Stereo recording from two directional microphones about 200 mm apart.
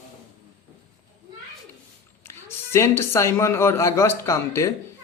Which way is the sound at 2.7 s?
15° left (ahead or behind).